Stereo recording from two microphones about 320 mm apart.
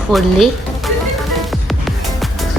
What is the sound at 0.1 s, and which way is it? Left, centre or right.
Speech, centre.